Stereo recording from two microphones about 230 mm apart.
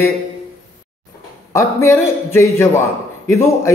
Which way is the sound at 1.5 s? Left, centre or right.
Centre.